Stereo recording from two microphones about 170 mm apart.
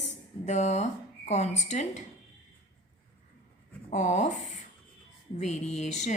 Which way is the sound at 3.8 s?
45° left (ahead or behind).